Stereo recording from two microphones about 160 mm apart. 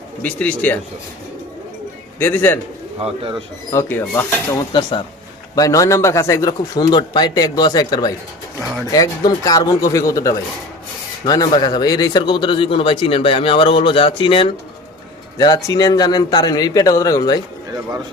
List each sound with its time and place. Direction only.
0.2 s speech: 10° left (ahead or behind)
2.1 s a man's voice: 10° left (ahead or behind)
3.0 s speech: 35° right (ahead or behind)
3.7 s speech: 15° left (ahead or behind)
4.7 s a man's voice: 30° left (ahead or behind)